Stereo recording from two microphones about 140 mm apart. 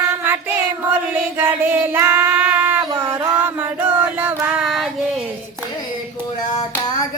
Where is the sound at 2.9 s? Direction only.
25° right (ahead or behind).